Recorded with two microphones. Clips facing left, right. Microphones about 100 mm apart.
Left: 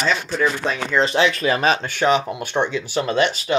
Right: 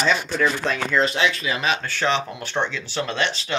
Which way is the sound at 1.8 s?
15° left (ahead or behind).